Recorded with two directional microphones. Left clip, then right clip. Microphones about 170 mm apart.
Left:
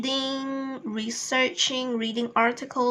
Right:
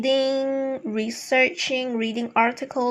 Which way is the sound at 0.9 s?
25° right (ahead or behind).